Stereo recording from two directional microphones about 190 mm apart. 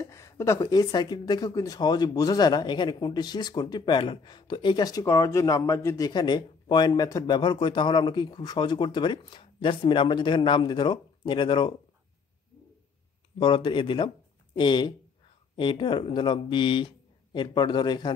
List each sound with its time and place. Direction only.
0.0 s speech: 15° left (ahead or behind)
13.4 s speech: 25° left (ahead or behind)